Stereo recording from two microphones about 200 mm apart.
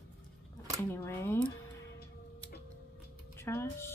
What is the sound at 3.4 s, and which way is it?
Speech, 15° left (ahead or behind).